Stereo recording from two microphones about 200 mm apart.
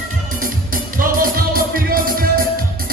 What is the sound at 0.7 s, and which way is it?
Music, 45° right (ahead or behind).